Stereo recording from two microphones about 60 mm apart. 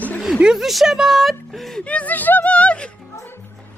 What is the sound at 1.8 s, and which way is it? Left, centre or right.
Speech, left.